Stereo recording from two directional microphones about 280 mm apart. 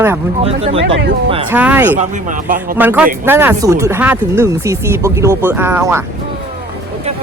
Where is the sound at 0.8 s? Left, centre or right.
Right.